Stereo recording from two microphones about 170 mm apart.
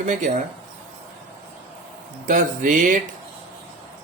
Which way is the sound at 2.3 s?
50° right (ahead or behind).